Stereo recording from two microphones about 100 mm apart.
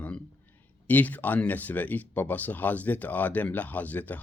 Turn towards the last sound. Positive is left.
turn(degrees=15)  # may be behind; listen again after turning